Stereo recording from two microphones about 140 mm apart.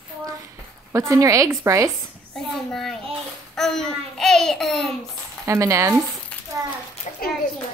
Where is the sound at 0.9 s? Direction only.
20° right (ahead or behind).